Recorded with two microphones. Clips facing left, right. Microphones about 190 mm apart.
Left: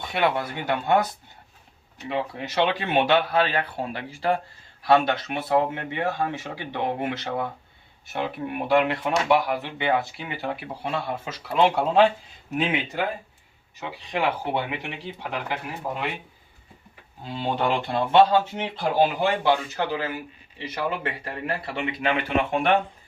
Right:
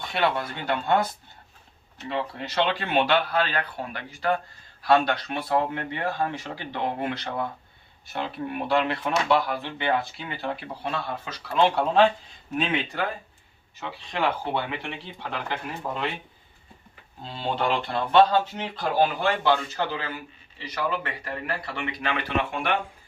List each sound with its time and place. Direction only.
0.0 s speech: 20° left (ahead or behind)
2.0 s speech: 15° left (ahead or behind)
17.2 s speech: 15° left (ahead or behind)
20.6 s speech: 25° left (ahead or behind)